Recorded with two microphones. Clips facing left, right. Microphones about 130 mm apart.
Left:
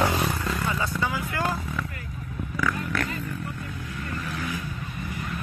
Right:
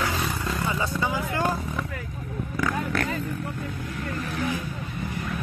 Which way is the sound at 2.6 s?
45° right (ahead or behind).